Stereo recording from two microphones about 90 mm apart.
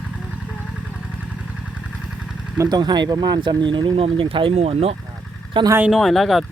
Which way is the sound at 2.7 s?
50° right (ahead or behind).